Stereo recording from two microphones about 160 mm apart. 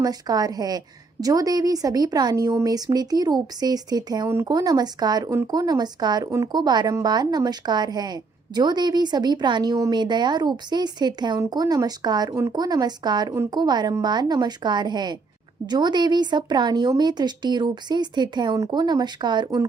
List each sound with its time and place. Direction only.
0.0 s a woman's voice: 25° right (ahead or behind)